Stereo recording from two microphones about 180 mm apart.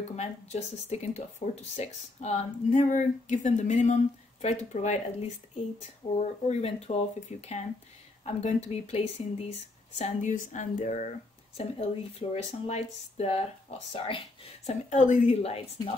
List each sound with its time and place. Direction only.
0.1 s speech: 40° left (ahead or behind)
11.6 s speech: 35° left (ahead or behind)
14.9 s speech: 45° left (ahead or behind)